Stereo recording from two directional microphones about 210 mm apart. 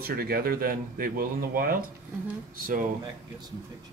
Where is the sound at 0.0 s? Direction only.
45° right (ahead or behind).